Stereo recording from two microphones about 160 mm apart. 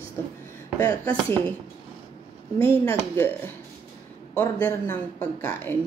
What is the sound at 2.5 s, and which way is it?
Speech, 35° right (ahead or behind).